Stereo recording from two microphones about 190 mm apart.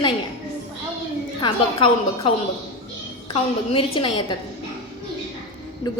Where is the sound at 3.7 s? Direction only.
30° left (ahead or behind).